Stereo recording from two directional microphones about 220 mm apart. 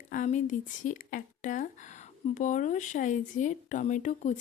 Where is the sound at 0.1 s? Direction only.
35° left (ahead or behind).